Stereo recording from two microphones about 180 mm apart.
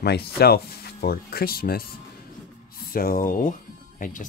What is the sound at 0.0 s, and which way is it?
Speech, 60° left (ahead or behind).